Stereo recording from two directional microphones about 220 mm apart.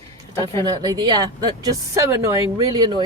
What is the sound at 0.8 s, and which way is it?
A woman's voice, 20° right (ahead or behind).